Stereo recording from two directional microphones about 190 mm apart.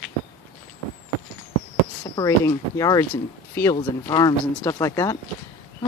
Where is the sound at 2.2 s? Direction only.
20° left (ahead or behind).